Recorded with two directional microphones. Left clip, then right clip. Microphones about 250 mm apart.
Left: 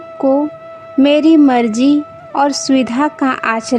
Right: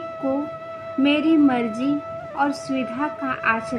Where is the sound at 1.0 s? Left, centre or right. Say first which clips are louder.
Left 9 dB; left.